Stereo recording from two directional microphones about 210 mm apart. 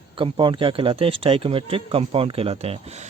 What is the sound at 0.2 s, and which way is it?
A man's voice, 25° right (ahead or behind).